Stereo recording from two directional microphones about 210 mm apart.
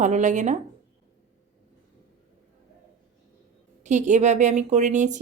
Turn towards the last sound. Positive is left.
turn(degrees=-35)  # may be behind; listen again after turning